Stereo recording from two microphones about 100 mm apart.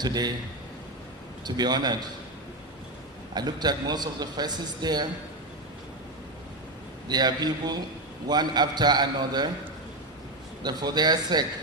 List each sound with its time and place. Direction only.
0.0 s a man's voice: 45° right (ahead or behind)
1.5 s a man's voice: 45° right (ahead or behind)
3.3 s a man's voice: 45° right (ahead or behind)
7.1 s a man's voice: 45° right (ahead or behind)
10.6 s a man's voice: 45° right (ahead or behind)